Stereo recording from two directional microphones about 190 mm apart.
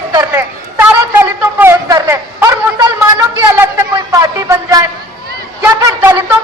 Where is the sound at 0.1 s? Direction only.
15° right (ahead or behind).